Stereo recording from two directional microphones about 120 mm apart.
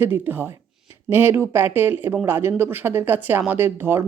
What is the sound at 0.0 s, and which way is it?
Speech, 15° right (ahead or behind).